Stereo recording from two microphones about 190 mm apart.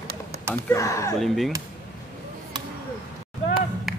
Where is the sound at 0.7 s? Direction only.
15° left (ahead or behind).